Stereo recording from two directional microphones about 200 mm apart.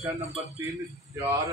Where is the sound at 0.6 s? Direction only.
15° right (ahead or behind).